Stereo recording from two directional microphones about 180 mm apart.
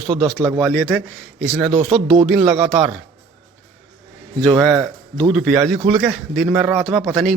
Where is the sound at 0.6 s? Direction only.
5° left (ahead or behind).